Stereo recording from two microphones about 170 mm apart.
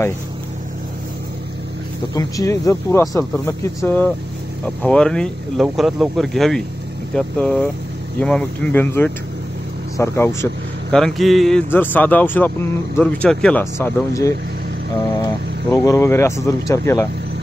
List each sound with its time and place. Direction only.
2.1 s speech: 20° left (ahead or behind)
11.0 s speech: centre (ahead or behind); by 14.3 s 15° left (ahead or behind)
15.7 s speech: 20° left (ahead or behind)